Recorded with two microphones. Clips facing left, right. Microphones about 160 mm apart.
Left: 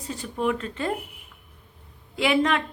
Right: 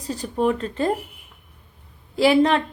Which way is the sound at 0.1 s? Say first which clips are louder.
Right 5 dB; 35° right (ahead or behind).